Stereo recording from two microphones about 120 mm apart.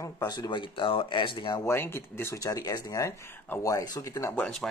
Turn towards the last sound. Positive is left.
turn(degrees=5)  # may be behind; listen again after turning